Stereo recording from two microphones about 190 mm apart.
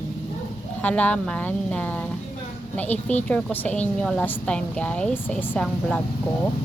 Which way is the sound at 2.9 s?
35° left (ahead or behind).